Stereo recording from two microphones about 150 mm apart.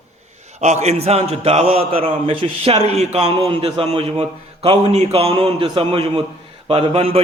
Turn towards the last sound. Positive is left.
turn(degrees=-40)  # may be behind; listen again after turning